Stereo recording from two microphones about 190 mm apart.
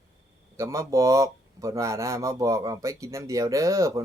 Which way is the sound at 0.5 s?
15° right (ahead or behind).